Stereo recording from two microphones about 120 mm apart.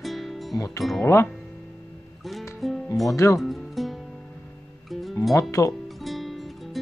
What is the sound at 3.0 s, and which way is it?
Speech, 25° left (ahead or behind).